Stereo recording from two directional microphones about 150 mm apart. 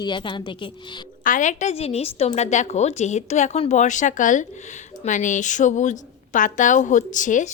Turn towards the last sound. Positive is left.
turn(degrees=60)  # may be behind; listen again after turning